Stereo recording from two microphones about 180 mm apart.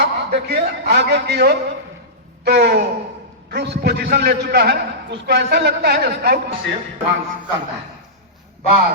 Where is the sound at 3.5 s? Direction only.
65° right (ahead or behind).